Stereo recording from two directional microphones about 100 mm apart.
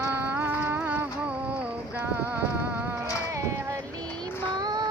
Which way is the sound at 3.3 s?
30° right (ahead or behind).